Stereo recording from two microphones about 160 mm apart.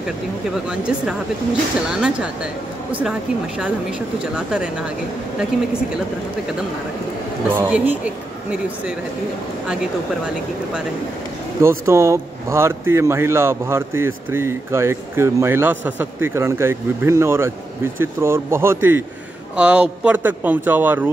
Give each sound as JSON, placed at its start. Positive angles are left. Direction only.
{"t": 0.7, "sound": "speech", "side_deg": -5}
{"t": 7.4, "sound": "speech", "side_deg": -10}
{"t": 11.6, "sound": "speech", "side_deg": -15}